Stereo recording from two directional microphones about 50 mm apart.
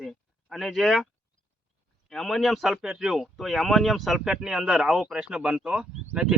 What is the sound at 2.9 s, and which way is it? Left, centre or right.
Speech, centre.